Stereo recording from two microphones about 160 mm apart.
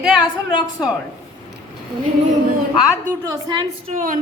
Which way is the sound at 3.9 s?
55° right (ahead or behind).